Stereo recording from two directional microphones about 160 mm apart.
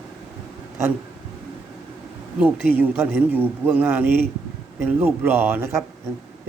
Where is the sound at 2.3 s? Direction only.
10° right (ahead or behind).